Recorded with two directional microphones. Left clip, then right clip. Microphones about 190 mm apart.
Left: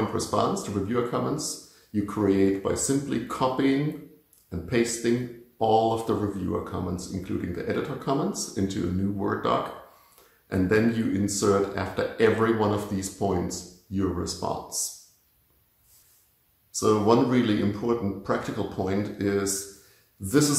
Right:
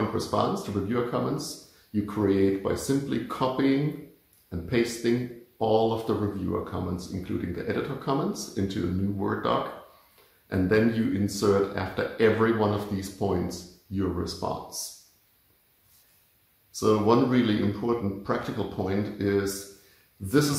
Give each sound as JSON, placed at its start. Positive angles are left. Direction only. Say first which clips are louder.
{"t": 0.2, "sound": "a man's voice", "louder": "left 1 dB", "side_deg": 5}
{"t": 16.7, "sound": "a man's voice", "louder": "left 1 dB", "side_deg": 5}